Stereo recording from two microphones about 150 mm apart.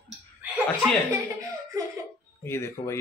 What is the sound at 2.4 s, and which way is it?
Speech, 15° left (ahead or behind).